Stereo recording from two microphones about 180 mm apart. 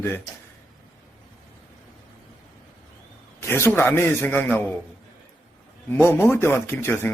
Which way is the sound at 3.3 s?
15° left (ahead or behind).